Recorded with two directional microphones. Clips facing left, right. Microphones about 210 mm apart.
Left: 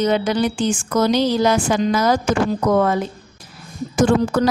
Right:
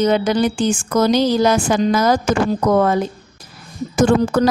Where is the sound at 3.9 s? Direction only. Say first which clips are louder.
Right 2 dB; 45° right (ahead or behind).